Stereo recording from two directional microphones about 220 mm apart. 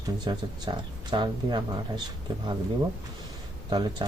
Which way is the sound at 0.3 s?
20° right (ahead or behind).